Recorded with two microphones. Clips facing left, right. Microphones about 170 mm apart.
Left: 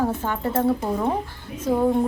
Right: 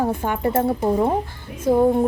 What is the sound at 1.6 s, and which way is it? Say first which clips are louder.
Speech: right 4 dB; 15° right (ahead or behind).